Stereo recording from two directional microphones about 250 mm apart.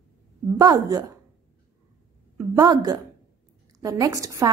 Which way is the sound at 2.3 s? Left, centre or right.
Centre.